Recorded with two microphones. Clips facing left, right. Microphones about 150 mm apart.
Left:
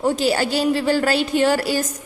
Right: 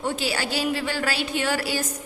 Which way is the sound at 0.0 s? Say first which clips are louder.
Left 8 dB; 45° left (ahead or behind).